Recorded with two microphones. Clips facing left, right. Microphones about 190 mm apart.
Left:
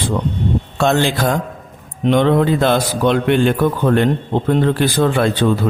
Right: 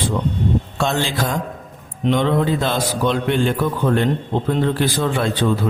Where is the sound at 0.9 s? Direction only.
60° left (ahead or behind).